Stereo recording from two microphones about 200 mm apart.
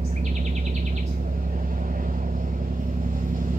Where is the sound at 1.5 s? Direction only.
40° right (ahead or behind).